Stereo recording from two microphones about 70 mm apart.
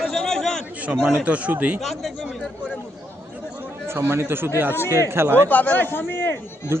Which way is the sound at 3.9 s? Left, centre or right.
Right.